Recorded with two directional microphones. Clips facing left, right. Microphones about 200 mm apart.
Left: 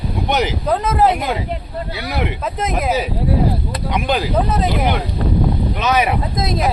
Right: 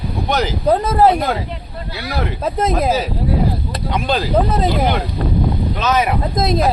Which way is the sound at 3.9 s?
15° left (ahead or behind).